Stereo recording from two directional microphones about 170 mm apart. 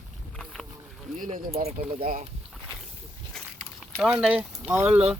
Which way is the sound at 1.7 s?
35° right (ahead or behind).